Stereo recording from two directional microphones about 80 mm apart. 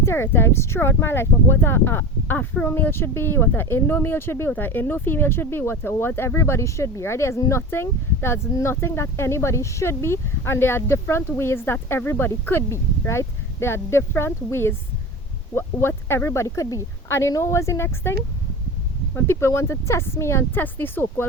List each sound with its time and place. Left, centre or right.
0.0 s speech: left
19.1 s speech: left